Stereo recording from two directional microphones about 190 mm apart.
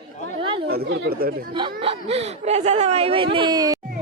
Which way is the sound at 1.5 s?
25° right (ahead or behind).